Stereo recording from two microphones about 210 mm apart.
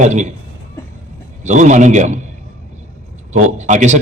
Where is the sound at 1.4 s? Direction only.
35° right (ahead or behind).